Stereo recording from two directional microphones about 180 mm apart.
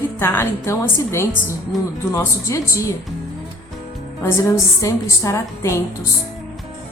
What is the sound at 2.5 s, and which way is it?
Speech, 15° left (ahead or behind).